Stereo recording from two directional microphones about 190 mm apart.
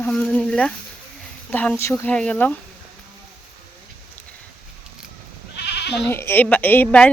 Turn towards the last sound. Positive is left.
turn(degrees=10)  # may be behind; listen again after turning